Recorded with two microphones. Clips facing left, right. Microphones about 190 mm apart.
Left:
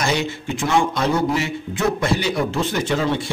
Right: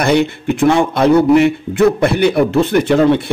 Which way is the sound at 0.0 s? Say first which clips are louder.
Right 9 dB; 60° right (ahead or behind).